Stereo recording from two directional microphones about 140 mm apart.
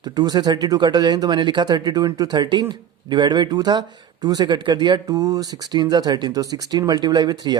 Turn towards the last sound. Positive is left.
turn(degrees=-30)  # may be behind; listen again after turning